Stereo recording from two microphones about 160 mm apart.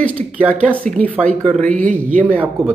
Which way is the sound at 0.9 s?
50° right (ahead or behind).